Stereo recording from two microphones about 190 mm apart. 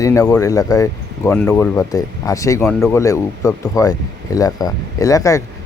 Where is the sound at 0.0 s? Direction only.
15° left (ahead or behind).